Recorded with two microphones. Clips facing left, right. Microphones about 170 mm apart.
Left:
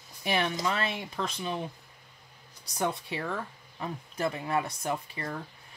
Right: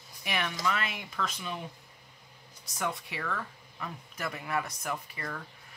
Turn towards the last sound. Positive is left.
turn(degrees=25)  # may be behind; listen again after turning